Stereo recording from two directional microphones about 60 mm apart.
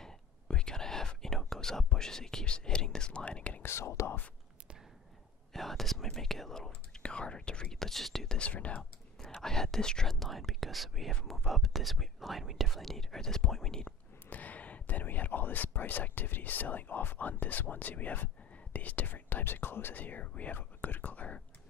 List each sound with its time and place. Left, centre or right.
0.0 s whispering: centre
3.6 s speech: left
5.5 s speech: centre
8.4 s speech: left
9.2 s speech: centre
10.1 s speech: centre
13.8 s speech: left